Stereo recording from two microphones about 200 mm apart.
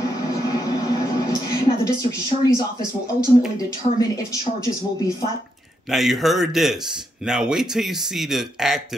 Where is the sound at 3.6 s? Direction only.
15° left (ahead or behind).